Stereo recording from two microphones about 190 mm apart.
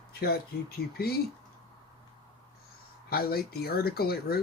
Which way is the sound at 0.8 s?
55° left (ahead or behind).